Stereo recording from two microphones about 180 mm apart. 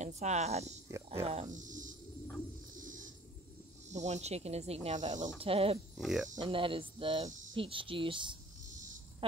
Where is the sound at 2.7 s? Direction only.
45° right (ahead or behind).